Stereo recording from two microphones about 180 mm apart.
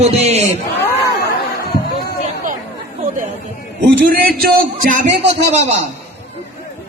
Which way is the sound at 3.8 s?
55° right (ahead or behind).